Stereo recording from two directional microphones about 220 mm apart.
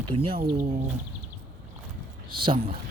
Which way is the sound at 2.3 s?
20° right (ahead or behind).